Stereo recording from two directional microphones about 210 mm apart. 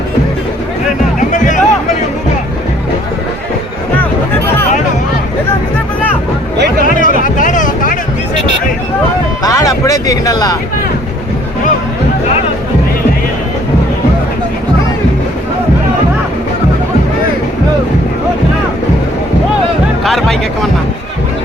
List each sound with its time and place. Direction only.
1.3 s music: 35° left (ahead or behind)
6.8 s a sound: 40° left (ahead or behind)
9.4 s music: 15° left (ahead or behind)
20.1 s music: centre (ahead or behind)